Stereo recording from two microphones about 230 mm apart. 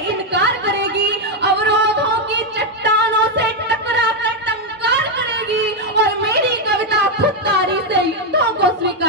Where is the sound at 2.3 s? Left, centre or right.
Right.